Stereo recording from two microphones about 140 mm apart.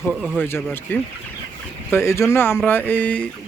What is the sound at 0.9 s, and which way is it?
Speech, 15° left (ahead or behind).